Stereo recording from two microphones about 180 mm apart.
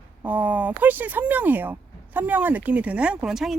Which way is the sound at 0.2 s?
10° right (ahead or behind).